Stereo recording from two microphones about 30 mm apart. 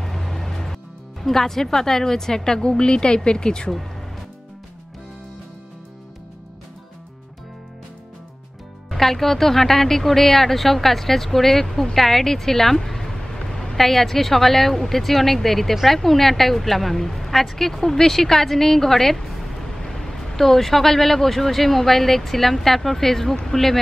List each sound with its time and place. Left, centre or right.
0.0 s music: centre
1.2 s speech: centre; by 3.7 s left
8.9 s speech: centre
11.7 s a sound: centre
13.7 s speech: centre
19.8 s speech: centre